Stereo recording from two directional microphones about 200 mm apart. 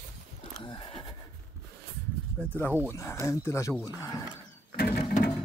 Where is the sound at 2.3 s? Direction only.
10° left (ahead or behind).